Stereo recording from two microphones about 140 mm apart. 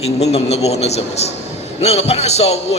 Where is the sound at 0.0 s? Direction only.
50° left (ahead or behind).